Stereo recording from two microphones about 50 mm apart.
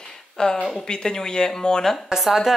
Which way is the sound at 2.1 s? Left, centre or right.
Centre.